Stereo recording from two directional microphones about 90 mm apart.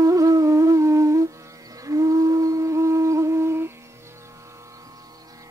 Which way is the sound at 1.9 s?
40° right (ahead or behind).